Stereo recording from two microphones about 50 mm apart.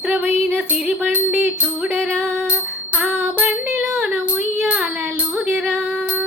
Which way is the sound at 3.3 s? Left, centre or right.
Right.